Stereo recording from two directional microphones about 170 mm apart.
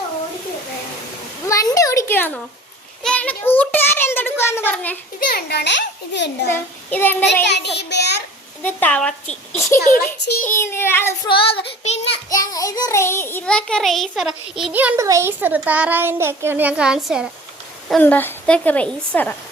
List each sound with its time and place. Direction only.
1.5 s a sound: 20° left (ahead or behind)
3.0 s a child's voice: 5° left (ahead or behind)
5.3 s a child's voice: 70° left (ahead or behind); by 6.5 s 90° left
6.5 s a woman's voice: 10° left (ahead or behind)
7.4 s a child's voice: 85° left
8.6 s a woman's voice: 10° left (ahead or behind)
9.7 s a child's voice: 50° left (ahead or behind)
10.4 s a woman's voice: 15° left (ahead or behind)
11.3 s child singing: 30° left (ahead or behind)
12.3 s child singing: 20° left (ahead or behind); by 17.2 s 5° right (ahead or behind)
18.0 s a woman's voice: 10° left (ahead or behind)